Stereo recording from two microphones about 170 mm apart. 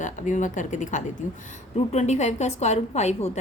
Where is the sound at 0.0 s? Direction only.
50° left (ahead or behind).